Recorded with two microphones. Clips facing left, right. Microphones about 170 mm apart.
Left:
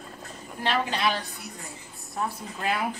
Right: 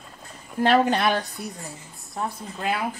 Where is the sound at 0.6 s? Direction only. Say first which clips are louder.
Right 8 dB; 50° right (ahead or behind).